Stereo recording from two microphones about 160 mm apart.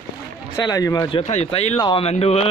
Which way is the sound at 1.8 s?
30° left (ahead or behind).